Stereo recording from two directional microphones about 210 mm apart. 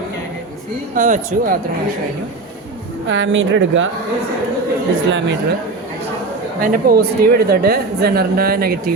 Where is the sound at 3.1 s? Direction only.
65° right (ahead or behind).